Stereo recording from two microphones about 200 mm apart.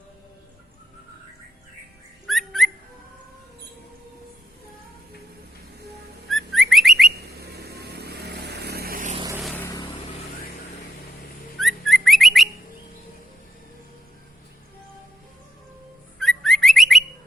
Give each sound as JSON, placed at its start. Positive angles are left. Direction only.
{"t": 2.2, "sound": "whistling", "side_deg": 0}
{"t": 6.2, "sound": "bird", "side_deg": 0}
{"t": 7.4, "sound": "vehicle", "side_deg": -50}
{"t": 9.6, "sound": "vehicle", "side_deg": 15}
{"t": 11.6, "sound": "bird", "side_deg": 0}
{"t": 16.1, "sound": "bird", "side_deg": 0}